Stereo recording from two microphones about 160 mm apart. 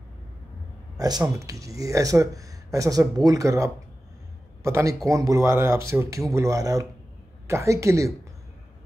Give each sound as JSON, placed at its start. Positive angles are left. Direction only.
{"t": 0.9, "sound": "a man's voice", "side_deg": -25}